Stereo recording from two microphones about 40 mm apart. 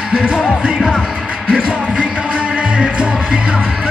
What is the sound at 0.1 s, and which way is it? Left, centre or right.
Music, right.